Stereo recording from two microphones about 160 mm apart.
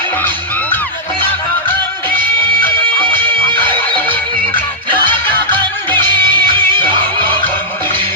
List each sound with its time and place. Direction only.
1.2 s music: 10° left (ahead or behind)
3.2 s music: 15° left (ahead or behind)
6.1 s music: 30° right (ahead or behind)